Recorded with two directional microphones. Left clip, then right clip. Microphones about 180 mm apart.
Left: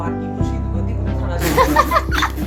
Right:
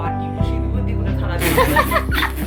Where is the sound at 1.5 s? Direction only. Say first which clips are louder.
Left 2 dB; 5° left (ahead or behind).